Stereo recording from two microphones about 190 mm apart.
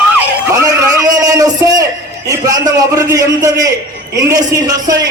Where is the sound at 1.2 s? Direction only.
20° right (ahead or behind).